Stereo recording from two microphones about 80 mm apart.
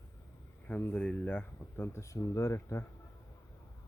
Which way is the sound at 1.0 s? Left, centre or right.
Centre.